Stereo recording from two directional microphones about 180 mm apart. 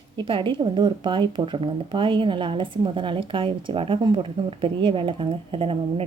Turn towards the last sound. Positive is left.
turn(degrees=-30)  # may be behind; listen again after turning